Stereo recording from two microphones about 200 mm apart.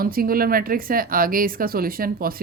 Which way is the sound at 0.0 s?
45° right (ahead or behind).